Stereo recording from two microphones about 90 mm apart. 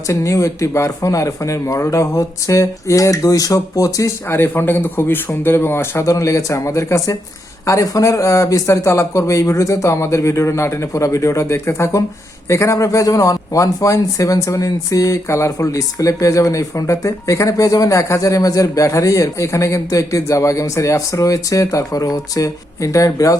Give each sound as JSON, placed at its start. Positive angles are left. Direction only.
{"t": 0.1, "sound": "speech", "side_deg": 35}
{"t": 4.3, "sound": "speech", "side_deg": 25}